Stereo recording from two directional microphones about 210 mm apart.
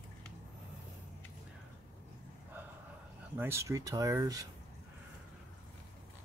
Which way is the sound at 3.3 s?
10° right (ahead or behind).